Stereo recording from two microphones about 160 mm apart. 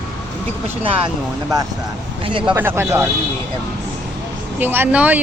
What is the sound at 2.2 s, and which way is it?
Speech, 30° right (ahead or behind).